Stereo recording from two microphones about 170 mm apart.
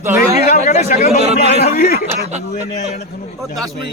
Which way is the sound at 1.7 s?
65° left (ahead or behind).